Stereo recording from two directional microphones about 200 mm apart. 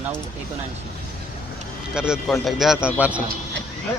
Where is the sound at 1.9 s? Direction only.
5° right (ahead or behind).